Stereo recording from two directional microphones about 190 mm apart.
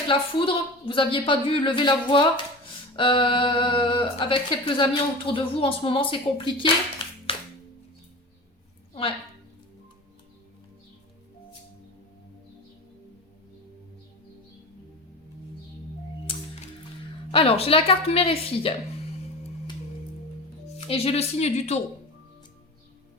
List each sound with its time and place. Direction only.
0.1 s speech: 25° left (ahead or behind)
7.3 s music: 30° left (ahead or behind)
16.2 s music: 30° left (ahead or behind)
17.3 s speech: 30° left (ahead or behind)
20.7 s speech: 30° left (ahead or behind)